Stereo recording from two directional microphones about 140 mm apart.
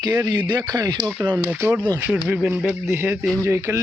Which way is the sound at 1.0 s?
15° right (ahead or behind).